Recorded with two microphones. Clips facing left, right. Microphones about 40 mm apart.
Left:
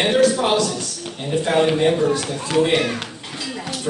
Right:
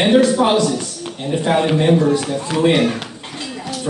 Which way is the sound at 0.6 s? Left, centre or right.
Right.